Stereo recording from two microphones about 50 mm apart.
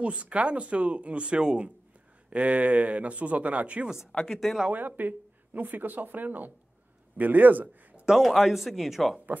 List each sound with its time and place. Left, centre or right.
0.0 s speech: right
2.2 s speech: right
4.3 s a man's voice: centre
4.6 s speech: right
8.2 s a man's voice: centre